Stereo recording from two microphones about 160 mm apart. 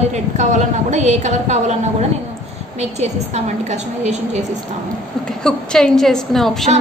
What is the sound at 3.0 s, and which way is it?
A woman's voice, 45° right (ahead or behind).